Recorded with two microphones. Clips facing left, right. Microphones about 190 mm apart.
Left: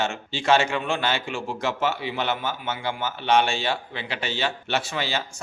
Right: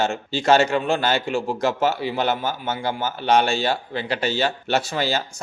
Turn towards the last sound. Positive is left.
turn(degrees=-40)  # may be behind; listen again after turning